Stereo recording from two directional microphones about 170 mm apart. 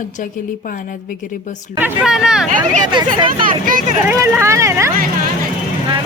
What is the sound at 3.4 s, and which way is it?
Speech, 55° right (ahead or behind).